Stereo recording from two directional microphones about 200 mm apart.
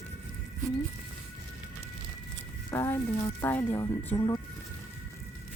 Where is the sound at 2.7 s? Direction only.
15° left (ahead or behind).